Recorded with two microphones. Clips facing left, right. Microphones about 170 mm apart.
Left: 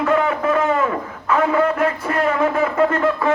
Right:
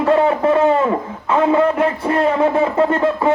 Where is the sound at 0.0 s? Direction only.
30° right (ahead or behind).